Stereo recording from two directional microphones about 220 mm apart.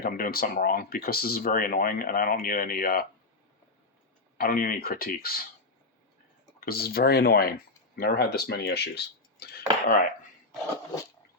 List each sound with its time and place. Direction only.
0.0 s speech: 40° left (ahead or behind)
4.4 s speech: 40° left (ahead or behind)
6.7 s speech: 45° left (ahead or behind)